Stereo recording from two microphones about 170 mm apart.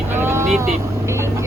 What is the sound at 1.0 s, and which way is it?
Vehicle, 15° right (ahead or behind).